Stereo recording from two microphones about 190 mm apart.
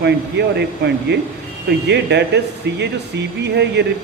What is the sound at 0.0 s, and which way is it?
Speech, 60° right (ahead or behind).